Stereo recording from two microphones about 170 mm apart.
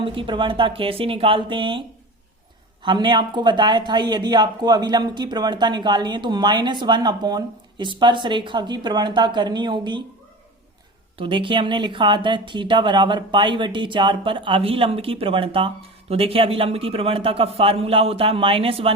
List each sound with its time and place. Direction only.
0.0 s speech: 30° right (ahead or behind)
2.8 s speech: 25° right (ahead or behind)
11.2 s speech: 30° right (ahead or behind)